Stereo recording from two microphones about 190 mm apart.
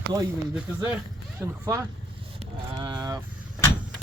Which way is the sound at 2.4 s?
25° right (ahead or behind).